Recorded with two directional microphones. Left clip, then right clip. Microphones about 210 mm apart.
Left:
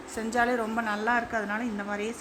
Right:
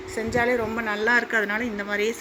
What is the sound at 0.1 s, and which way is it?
A woman's voice, 10° left (ahead or behind).